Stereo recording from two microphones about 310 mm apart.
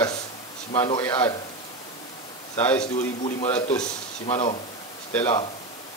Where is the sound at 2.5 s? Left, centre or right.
Centre.